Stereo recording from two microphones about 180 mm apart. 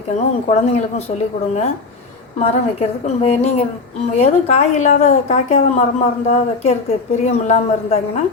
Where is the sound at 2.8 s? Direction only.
35° left (ahead or behind).